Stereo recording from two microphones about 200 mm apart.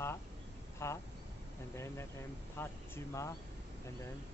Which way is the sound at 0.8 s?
10° left (ahead or behind).